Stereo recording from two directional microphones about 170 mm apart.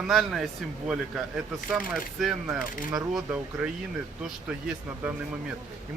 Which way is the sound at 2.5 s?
15° right (ahead or behind).